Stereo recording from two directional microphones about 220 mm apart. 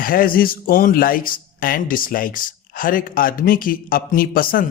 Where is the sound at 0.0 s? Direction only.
40° left (ahead or behind).